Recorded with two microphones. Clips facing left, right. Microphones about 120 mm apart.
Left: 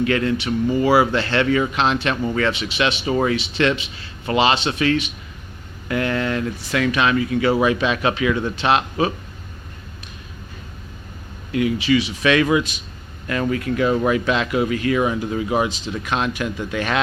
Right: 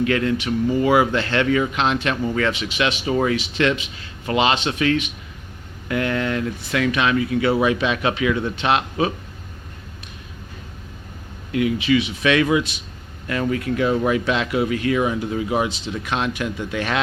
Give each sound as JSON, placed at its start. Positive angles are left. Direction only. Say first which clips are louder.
{"t": 0.0, "sound": "speech", "louder": "even", "side_deg": 35}
{"t": 11.5, "sound": "speech", "louder": "even", "side_deg": 35}